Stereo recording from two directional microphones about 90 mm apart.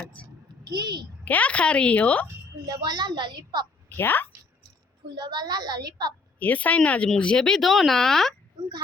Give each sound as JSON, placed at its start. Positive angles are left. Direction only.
{"t": 0.6, "sound": "a child's voice", "side_deg": -50}
{"t": 1.2, "sound": "a woman's voice", "side_deg": 15}
{"t": 2.2, "sound": "a child's voice", "side_deg": -50}
{"t": 3.8, "sound": "a woman's voice", "side_deg": 20}
{"t": 5.1, "sound": "a woman's voice", "side_deg": -55}
{"t": 6.4, "sound": "a woman's voice", "side_deg": 15}